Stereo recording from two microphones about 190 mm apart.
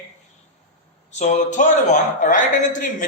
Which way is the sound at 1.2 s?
40° left (ahead or behind).